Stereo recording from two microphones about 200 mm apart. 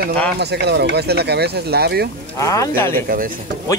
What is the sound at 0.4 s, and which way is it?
Speech, 55° right (ahead or behind).